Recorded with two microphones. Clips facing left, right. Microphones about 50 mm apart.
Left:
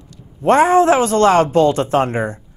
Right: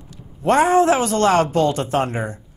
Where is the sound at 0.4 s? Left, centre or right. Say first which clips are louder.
Left 3 dB; left.